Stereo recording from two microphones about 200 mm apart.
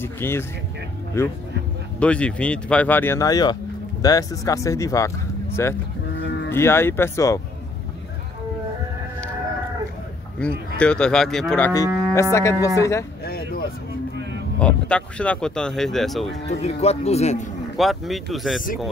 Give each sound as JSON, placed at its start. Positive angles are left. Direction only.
{"t": 0.0, "sound": "speech", "side_deg": 10}
{"t": 10.4, "sound": "speech", "side_deg": 5}
{"t": 11.7, "sound": "speech", "side_deg": 15}
{"t": 13.2, "sound": "a sound", "side_deg": 50}
{"t": 14.6, "sound": "speech", "side_deg": 5}
{"t": 16.4, "sound": "speech", "side_deg": 30}
{"t": 17.7, "sound": "speech", "side_deg": 0}